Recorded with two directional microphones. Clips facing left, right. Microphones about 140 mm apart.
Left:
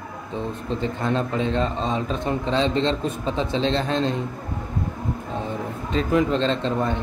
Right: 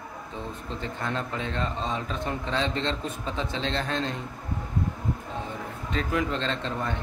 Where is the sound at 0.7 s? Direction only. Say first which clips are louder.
Left 7 dB; 25° left (ahead or behind).